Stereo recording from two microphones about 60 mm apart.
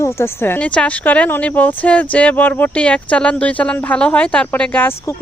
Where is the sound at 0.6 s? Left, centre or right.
Left.